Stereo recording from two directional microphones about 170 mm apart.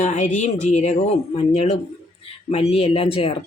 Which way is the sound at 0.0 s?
45° left (ahead or behind).